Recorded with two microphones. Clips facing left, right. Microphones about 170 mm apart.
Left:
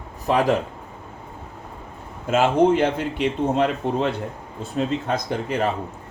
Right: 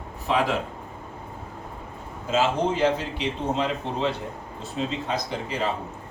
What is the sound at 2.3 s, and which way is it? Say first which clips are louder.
A man's voice: left 6 dB; 55° left (ahead or behind).